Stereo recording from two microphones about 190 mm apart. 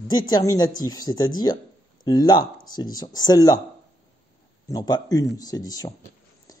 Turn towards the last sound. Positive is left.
turn(degrees=20)  # may be behind; listen again after turning